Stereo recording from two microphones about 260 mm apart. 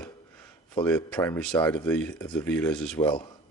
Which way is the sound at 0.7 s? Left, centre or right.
Centre.